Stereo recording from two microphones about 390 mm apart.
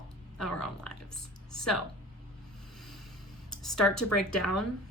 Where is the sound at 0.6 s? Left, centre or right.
Left.